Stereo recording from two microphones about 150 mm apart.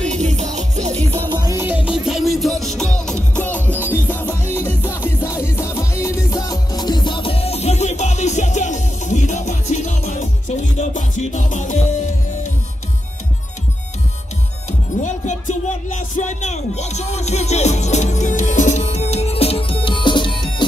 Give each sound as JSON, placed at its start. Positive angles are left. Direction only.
{"t": 0.1, "sound": "music", "side_deg": -50}
{"t": 0.9, "sound": "music", "side_deg": 15}
{"t": 1.4, "sound": "music", "side_deg": -15}
{"t": 14.7, "sound": "music", "side_deg": 50}